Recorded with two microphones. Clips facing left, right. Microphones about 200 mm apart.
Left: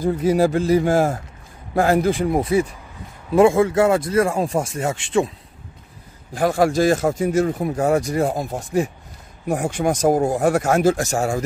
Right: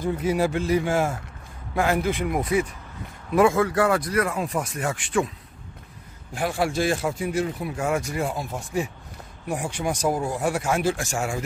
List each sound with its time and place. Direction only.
0.0 s a man's voice: 40° left (ahead or behind)
6.3 s a man's voice: 45° left (ahead or behind)